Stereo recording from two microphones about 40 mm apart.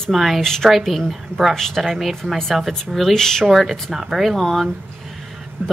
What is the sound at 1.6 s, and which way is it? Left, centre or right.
Speech, centre.